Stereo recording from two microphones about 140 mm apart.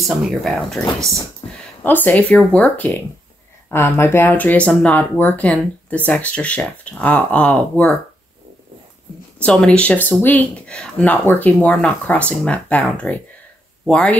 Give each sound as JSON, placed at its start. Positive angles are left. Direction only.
{"t": 0.1, "sound": "speech", "side_deg": 0}
{"t": 1.4, "sound": "a sound", "side_deg": 35}
{"t": 1.8, "sound": "speech", "side_deg": 10}
{"t": 9.4, "sound": "speech", "side_deg": 10}